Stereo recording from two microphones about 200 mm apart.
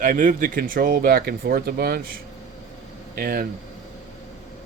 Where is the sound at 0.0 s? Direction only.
40° right (ahead or behind).